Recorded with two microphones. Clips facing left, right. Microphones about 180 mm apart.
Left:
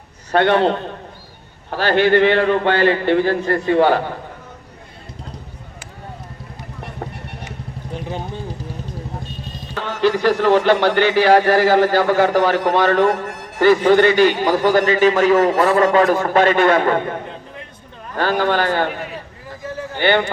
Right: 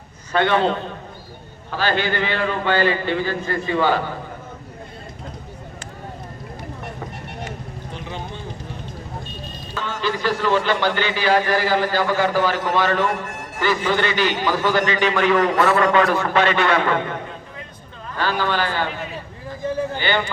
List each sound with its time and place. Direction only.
0.3 s speech: 65° left (ahead or behind)
9.7 s a man's voice: 65° left (ahead or behind); by 17.2 s 45° left (ahead or behind)
18.2 s a man's voice: 55° left (ahead or behind)
20.0 s speech: 60° left (ahead or behind)